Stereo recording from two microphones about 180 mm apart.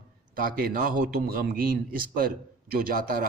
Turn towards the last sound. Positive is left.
turn(degrees=-55)  # may be behind; listen again after turning